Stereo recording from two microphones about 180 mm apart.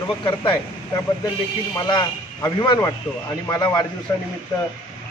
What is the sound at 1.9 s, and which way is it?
A man's voice, 25° left (ahead or behind).